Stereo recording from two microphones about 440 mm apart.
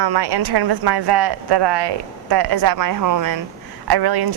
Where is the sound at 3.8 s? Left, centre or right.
Right.